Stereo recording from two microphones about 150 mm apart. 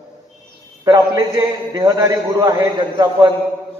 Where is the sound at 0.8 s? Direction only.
25° right (ahead or behind).